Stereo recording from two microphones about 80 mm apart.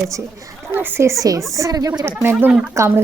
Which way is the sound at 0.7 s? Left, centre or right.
Right.